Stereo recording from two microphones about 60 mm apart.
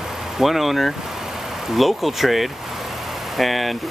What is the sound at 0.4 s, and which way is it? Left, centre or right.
Speech, centre.